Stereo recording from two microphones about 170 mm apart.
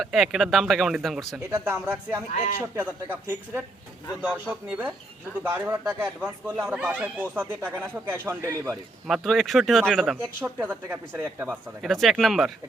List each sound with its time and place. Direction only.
0.0 s speech: centre (ahead or behind)
1.5 s speech: 15° right (ahead or behind)
9.0 s speech: centre (ahead or behind)
11.8 s speech: centre (ahead or behind)